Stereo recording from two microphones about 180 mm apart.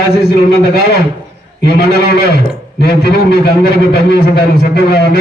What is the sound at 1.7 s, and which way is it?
A man's voice, 65° left (ahead or behind).